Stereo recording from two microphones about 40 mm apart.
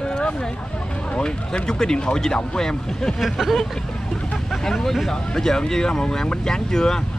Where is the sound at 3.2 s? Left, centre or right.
Centre.